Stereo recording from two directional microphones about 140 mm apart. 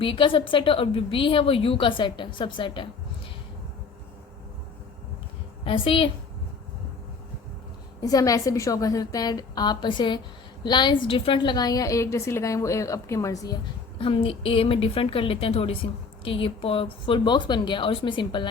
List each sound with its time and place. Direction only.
0.0 s a woman's voice: 40° left (ahead or behind)
5.6 s a woman's voice: 40° left (ahead or behind)
8.0 s a woman's voice: 25° left (ahead or behind)
14.0 s a woman's voice: 40° left (ahead or behind)